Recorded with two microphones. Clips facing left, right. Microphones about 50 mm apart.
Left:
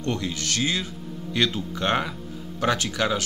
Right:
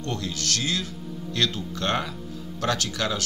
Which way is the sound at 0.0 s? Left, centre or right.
Left.